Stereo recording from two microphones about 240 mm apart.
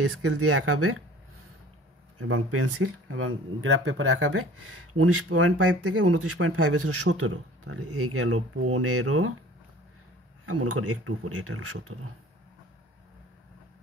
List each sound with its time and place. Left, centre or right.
0.0 s speech: right
2.1 s speech: right
10.4 s speech: right